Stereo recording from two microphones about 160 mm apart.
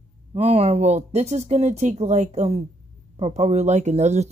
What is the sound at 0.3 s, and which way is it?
Speech, 40° right (ahead or behind).